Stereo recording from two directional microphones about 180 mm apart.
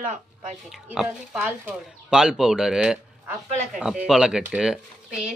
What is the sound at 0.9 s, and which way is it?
Speech, 5° right (ahead or behind).